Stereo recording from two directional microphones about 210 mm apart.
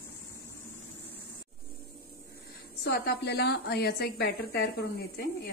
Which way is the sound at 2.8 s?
50° left (ahead or behind).